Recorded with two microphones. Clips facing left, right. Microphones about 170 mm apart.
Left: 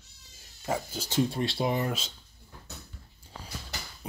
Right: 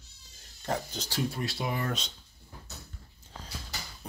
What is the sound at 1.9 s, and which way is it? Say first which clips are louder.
Speech: left 1 dB; 5° left (ahead or behind).